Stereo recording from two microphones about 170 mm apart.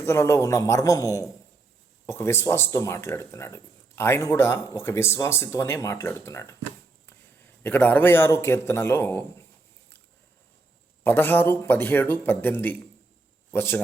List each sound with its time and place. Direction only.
0.0 s speech: 15° left (ahead or behind)
11.0 s speech: 10° left (ahead or behind)